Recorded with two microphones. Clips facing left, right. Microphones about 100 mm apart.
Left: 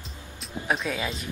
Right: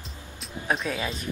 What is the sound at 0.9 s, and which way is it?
Music, centre (ahead or behind).